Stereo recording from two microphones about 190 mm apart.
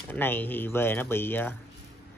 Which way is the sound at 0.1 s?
10° left (ahead or behind).